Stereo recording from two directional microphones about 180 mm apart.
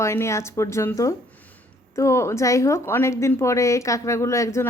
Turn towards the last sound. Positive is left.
turn(degrees=15)  # may be behind; listen again after turning